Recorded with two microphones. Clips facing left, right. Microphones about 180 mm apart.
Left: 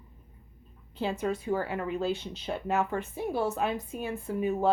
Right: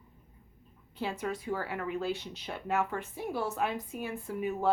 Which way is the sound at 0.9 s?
25° left (ahead or behind).